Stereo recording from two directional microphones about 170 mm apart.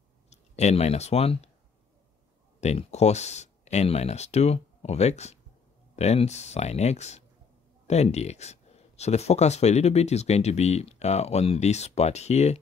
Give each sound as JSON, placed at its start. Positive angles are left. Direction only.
{"t": 0.3, "sound": "speech", "side_deg": 40}
{"t": 2.6, "sound": "speech", "side_deg": 40}